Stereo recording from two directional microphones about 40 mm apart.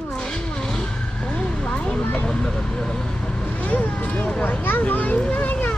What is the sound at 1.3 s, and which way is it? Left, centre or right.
Speech, left.